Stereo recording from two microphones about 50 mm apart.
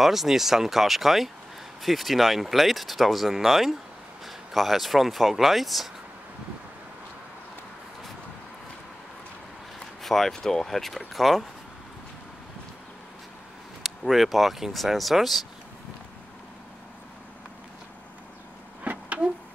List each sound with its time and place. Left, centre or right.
0.0 s speech: centre
9.8 s speech: centre
13.8 s speech: centre
18.9 s a sound: right